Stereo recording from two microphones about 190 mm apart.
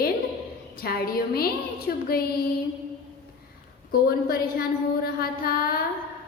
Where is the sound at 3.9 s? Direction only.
50° left (ahead or behind).